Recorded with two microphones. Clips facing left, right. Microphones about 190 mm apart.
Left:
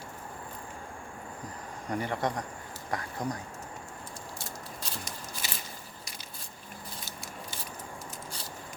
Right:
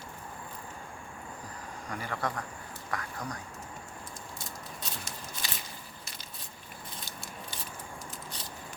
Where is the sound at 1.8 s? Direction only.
20° left (ahead or behind).